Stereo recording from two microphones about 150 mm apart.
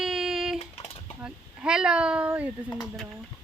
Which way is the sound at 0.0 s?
5° right (ahead or behind).